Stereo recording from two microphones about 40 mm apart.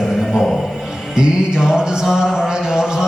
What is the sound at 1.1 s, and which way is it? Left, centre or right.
Mantra, centre.